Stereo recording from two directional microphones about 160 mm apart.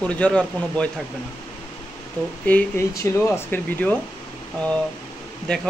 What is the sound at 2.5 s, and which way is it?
Speech, 10° left (ahead or behind).